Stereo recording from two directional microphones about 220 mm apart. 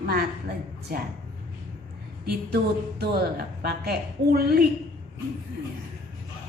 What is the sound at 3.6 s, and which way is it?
A woman's voice, 45° right (ahead or behind).